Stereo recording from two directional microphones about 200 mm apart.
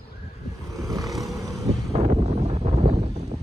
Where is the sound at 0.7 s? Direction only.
15° right (ahead or behind).